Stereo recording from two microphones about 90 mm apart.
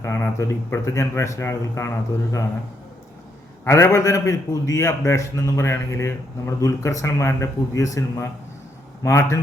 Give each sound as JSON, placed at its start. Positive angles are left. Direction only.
{"t": 0.0, "sound": "a man's voice", "side_deg": 30}
{"t": 3.6, "sound": "a man's voice", "side_deg": 30}